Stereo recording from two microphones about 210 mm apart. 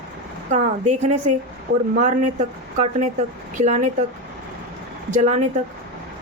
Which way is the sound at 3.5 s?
35° right (ahead or behind).